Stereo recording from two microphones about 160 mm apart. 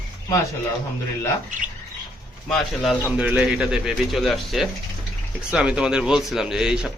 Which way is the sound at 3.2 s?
5° right (ahead or behind).